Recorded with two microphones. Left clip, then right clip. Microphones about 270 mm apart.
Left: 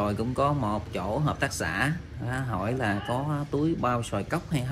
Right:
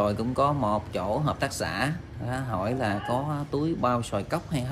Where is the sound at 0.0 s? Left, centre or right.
Centre.